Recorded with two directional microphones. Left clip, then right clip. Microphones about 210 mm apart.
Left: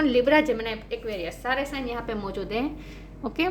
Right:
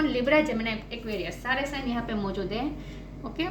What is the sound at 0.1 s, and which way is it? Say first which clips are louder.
A woman's voice: left 3 dB; 55° left (ahead or behind).